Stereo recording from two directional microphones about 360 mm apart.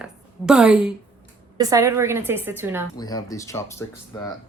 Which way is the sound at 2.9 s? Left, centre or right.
Centre.